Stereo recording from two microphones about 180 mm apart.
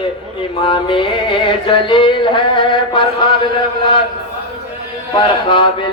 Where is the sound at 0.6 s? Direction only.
25° left (ahead or behind).